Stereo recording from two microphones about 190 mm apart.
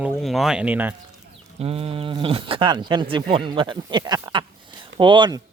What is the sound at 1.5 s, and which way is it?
Speech, 30° right (ahead or behind).